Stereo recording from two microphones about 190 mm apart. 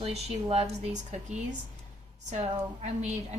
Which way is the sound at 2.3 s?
35° right (ahead or behind).